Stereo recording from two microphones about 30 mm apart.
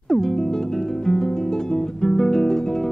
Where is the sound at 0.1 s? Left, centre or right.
Centre.